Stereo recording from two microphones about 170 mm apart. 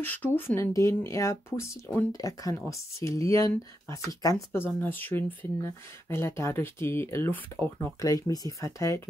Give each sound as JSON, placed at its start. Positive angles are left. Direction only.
{"t": 0.0, "sound": "speech", "side_deg": 10}